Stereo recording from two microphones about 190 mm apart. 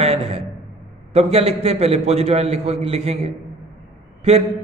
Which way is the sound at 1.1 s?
30° right (ahead or behind).